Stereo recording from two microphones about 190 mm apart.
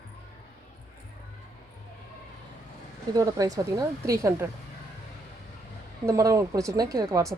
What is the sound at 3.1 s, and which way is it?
Speech, 20° right (ahead or behind).